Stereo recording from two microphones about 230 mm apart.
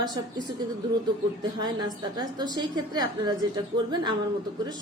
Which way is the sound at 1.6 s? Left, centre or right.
Centre.